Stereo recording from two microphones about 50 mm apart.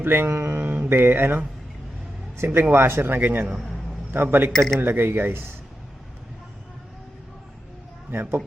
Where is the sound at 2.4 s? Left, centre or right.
Right.